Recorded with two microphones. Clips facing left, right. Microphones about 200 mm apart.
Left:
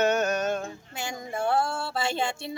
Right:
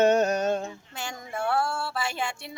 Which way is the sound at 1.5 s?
20° left (ahead or behind).